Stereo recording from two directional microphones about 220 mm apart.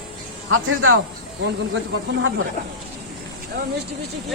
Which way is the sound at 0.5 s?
70° right (ahead or behind).